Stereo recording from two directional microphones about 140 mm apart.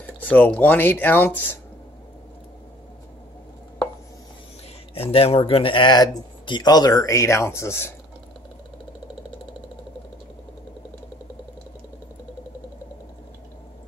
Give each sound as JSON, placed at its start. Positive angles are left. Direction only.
{"t": 0.2, "sound": "speech", "side_deg": 10}
{"t": 5.1, "sound": "speech", "side_deg": 40}